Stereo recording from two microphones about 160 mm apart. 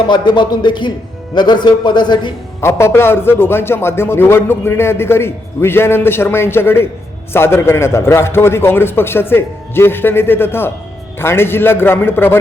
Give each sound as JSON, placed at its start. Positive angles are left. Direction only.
{"t": 0.1, "sound": "a man's voice", "side_deg": 30}
{"t": 2.6, "sound": "a man's voice", "side_deg": 15}